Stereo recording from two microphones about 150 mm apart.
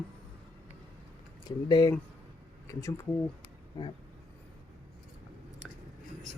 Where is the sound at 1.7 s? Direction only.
25° left (ahead or behind).